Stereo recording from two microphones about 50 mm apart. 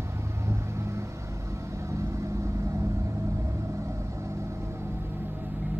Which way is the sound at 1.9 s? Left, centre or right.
Right.